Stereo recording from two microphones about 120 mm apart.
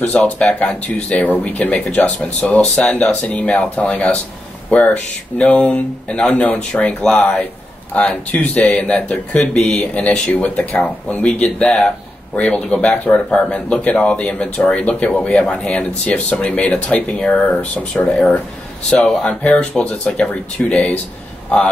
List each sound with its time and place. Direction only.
0.1 s speech: 5° left (ahead or behind)